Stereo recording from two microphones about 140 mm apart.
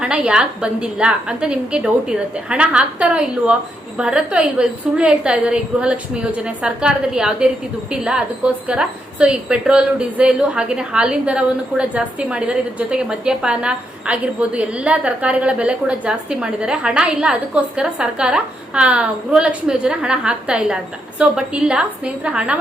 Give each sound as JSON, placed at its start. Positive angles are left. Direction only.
{"t": 0.0, "sound": "a woman's voice", "side_deg": -10}